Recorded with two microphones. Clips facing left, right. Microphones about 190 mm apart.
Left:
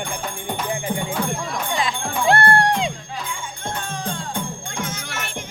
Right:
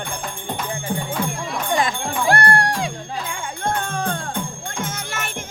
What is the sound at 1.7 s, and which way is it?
Music, 50° right (ahead or behind).